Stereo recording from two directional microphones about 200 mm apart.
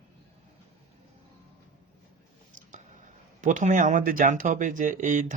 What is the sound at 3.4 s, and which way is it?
Speech, 40° right (ahead or behind).